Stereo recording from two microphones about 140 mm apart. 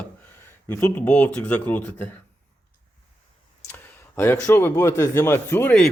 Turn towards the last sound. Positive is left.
turn(degrees=15)  # may be behind; listen again after turning